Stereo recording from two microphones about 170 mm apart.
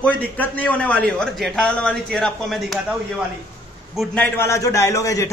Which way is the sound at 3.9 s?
5° left (ahead or behind).